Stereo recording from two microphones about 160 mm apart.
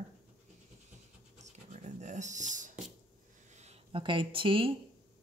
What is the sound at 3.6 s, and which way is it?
Speech, 35° right (ahead or behind).